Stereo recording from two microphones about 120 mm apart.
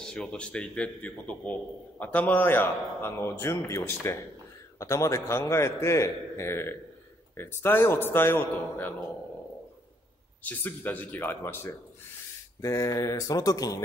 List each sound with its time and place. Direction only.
0.0 s a man's voice: 5° left (ahead or behind)
10.4 s a man's voice: 15° left (ahead or behind); by 13.8 s 30° left (ahead or behind)